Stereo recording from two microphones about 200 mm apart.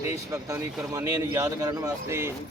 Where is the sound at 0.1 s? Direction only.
15° right (ahead or behind).